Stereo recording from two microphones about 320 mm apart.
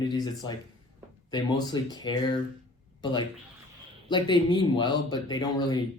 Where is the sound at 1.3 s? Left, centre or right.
Centre.